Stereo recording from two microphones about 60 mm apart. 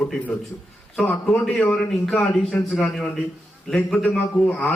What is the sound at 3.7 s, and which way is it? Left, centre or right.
Speech, centre.